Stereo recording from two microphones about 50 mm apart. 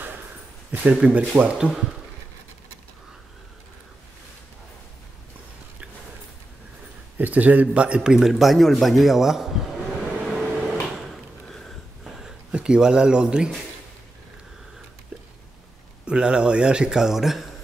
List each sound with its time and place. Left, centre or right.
0.8 s speech: right
7.2 s a man's voice: right
7.6 s a man's voice: right; by 10.0 s centre
10.5 s a sound: centre
10.9 s a sound: centre
11.4 s sniff: centre
12.1 s a sound: centre
12.5 s speech: centre
16.1 s speech: centre